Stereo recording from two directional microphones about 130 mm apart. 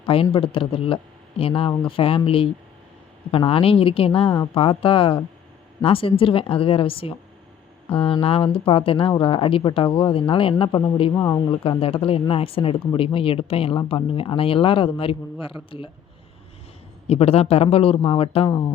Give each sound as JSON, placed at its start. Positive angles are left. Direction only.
{"t": 0.0, "sound": "speech", "side_deg": 45}
{"t": 11.1, "sound": "speech", "side_deg": 25}
{"t": 11.8, "sound": "speech", "side_deg": 45}
{"t": 17.1, "sound": "speech", "side_deg": 50}
{"t": 18.4, "sound": "speech", "side_deg": 30}